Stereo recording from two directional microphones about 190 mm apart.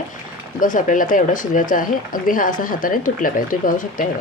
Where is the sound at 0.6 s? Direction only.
45° left (ahead or behind).